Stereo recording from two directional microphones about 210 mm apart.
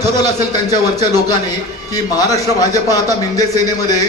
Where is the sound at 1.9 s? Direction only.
15° left (ahead or behind).